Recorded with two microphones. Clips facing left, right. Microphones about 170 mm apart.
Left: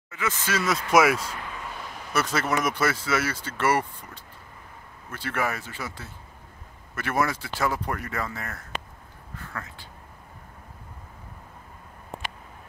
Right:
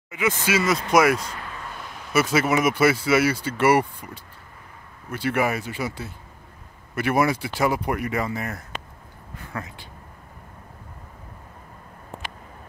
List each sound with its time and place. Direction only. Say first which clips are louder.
0.1 s speech: right 6 dB; 15° right (ahead or behind)